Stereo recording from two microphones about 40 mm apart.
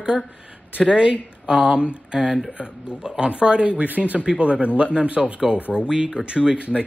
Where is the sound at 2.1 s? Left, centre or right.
Centre.